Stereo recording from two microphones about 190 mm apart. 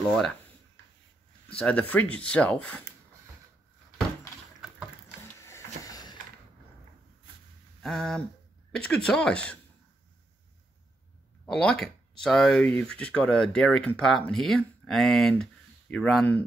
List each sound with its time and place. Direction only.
1.5 s speech: 5° left (ahead or behind)
5.9 s a sound: 20° left (ahead or behind)
7.8 s speech: 5° left (ahead or behind)
11.4 s speech: 5° left (ahead or behind)